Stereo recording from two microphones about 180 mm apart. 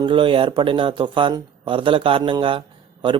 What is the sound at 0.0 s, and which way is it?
Speech, 30° right (ahead or behind).